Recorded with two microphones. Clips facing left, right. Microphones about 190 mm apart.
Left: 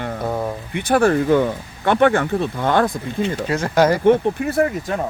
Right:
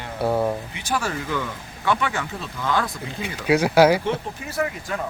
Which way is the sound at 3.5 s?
10° right (ahead or behind).